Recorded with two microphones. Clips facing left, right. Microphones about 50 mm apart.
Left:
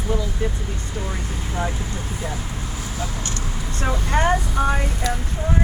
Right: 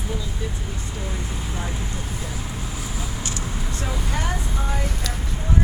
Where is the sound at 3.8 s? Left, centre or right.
Left.